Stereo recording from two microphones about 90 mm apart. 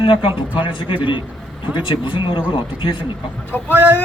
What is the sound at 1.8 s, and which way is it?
Speech, 70° left (ahead or behind).